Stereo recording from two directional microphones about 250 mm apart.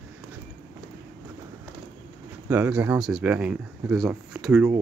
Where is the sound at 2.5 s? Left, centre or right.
Centre.